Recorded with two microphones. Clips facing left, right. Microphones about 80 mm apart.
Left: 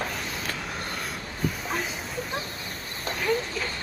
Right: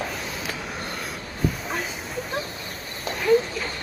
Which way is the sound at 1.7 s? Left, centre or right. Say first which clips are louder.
Right 1 dB; centre.